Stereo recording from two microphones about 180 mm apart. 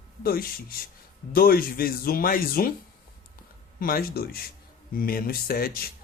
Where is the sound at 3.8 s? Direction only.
55° left (ahead or behind).